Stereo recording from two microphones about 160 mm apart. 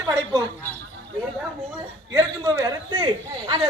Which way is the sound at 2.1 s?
20° right (ahead or behind).